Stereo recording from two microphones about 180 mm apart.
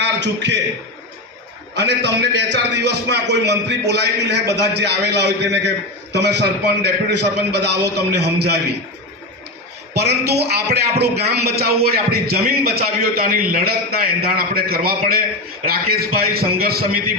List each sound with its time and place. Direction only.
0.0 s a man's voice: 75° right (ahead or behind)
1.7 s a man's voice: 70° right (ahead or behind)
9.9 s a man's voice: 65° right (ahead or behind)